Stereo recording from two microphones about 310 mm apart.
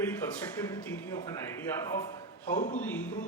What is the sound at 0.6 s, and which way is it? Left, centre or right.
A man's voice, centre.